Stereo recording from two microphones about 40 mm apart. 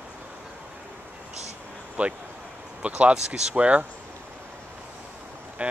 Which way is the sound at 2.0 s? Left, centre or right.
Right.